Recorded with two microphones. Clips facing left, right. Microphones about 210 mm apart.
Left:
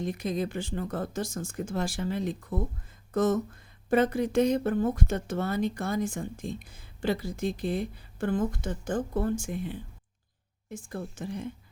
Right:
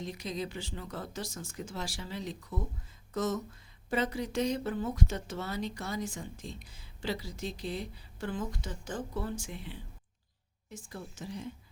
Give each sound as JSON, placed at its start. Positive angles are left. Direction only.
{"t": 0.0, "sound": "speech", "side_deg": 55}